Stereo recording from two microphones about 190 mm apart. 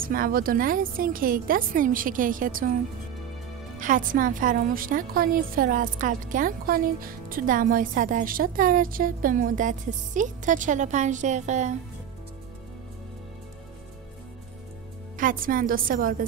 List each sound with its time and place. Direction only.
0.0 s a woman's voice: 50° right (ahead or behind)
3.8 s a woman's voice: 45° right (ahead or behind)
15.1 s a woman's voice: 45° right (ahead or behind)